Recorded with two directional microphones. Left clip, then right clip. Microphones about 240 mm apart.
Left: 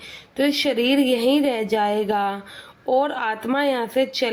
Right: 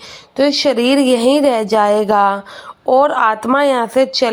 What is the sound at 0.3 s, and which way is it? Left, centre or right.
A woman's voice, centre.